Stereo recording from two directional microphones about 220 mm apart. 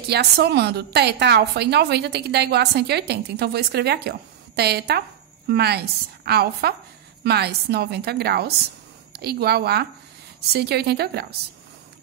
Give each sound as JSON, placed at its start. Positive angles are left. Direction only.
{"t": 0.1, "sound": "a woman's voice", "side_deg": -50}